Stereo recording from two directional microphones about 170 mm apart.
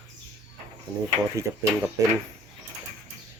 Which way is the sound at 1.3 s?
10° right (ahead or behind).